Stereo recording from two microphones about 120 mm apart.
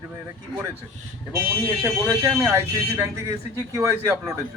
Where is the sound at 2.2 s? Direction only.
20° right (ahead or behind).